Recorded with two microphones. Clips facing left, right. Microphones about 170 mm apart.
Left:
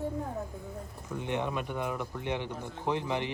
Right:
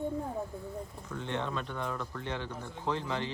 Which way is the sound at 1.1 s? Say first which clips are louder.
Left 3 dB; 15° left (ahead or behind).